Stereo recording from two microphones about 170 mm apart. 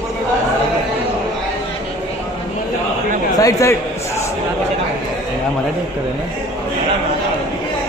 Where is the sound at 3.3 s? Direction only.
20° left (ahead or behind).